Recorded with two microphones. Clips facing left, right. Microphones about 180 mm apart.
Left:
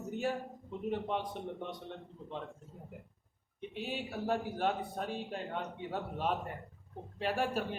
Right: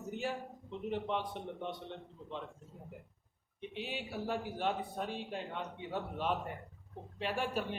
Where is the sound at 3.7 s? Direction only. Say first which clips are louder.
Left 2 dB; 45° left (ahead or behind).